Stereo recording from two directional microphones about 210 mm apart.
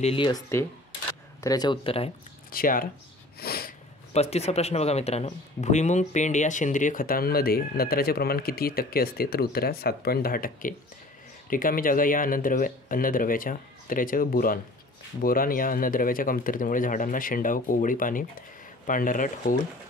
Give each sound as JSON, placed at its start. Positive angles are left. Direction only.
{"t": 0.0, "sound": "speech", "side_deg": 25}
{"t": 1.4, "sound": "speech", "side_deg": 20}
{"t": 2.5, "sound": "speech", "side_deg": 40}
{"t": 3.3, "sound": "sneeze", "side_deg": 45}
{"t": 4.1, "sound": "speech", "side_deg": 30}